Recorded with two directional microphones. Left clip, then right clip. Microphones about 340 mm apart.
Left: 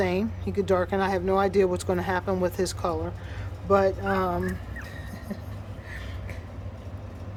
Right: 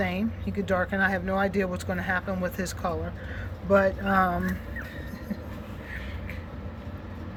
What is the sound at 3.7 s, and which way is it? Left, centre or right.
Speech, centre.